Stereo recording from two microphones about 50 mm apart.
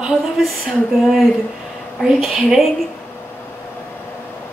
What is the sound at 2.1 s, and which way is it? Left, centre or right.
Speech, centre.